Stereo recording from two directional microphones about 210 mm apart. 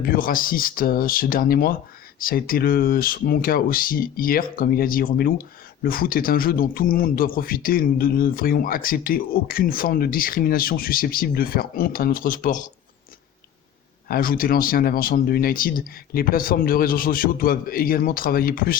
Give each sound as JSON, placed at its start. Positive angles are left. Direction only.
{"t": 0.0, "sound": "speech", "side_deg": 45}
{"t": 14.1, "sound": "speech", "side_deg": 45}